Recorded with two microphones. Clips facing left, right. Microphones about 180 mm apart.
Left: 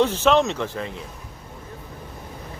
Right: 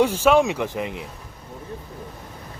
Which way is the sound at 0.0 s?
10° right (ahead or behind).